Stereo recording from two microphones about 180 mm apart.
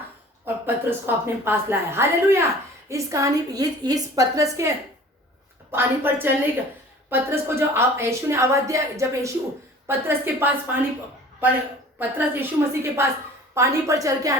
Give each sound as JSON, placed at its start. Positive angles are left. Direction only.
{"t": 0.4, "sound": "a woman's voice", "side_deg": -10}
{"t": 5.7, "sound": "a woman's voice", "side_deg": -10}
{"t": 11.9, "sound": "a woman's voice", "side_deg": -10}